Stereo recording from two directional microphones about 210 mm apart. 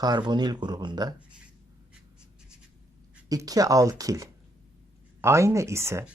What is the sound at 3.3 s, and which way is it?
Speech, 15° right (ahead or behind).